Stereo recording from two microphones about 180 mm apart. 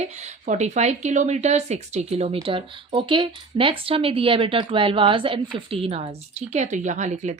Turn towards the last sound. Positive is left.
turn(degrees=-40)  # may be behind; listen again after turning